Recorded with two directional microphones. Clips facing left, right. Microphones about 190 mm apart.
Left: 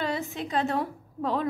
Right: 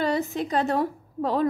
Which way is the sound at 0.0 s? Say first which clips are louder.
Right 5 dB; 40° right (ahead or behind).